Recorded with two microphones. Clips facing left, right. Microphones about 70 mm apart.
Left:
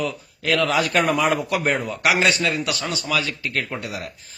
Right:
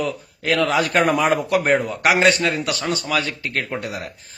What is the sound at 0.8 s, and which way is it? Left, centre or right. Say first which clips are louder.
A man's voice: right 2 dB; right.